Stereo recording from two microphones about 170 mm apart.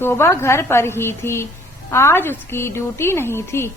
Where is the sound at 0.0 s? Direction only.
15° left (ahead or behind).